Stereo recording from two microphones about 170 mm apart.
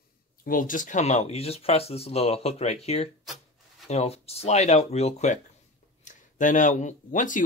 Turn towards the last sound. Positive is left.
turn(degrees=50)  # may be behind; listen again after turning